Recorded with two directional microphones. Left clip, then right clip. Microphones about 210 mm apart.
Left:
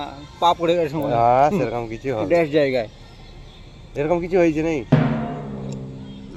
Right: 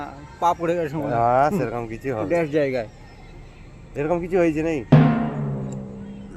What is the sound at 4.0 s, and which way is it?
Speech, 15° right (ahead or behind).